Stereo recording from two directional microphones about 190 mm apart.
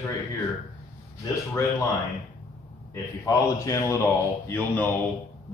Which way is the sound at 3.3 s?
20° left (ahead or behind).